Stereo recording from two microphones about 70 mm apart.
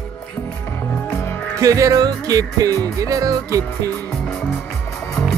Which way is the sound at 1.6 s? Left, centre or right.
Right.